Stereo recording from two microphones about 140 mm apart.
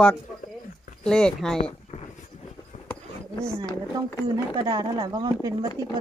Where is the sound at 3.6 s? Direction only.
25° right (ahead or behind).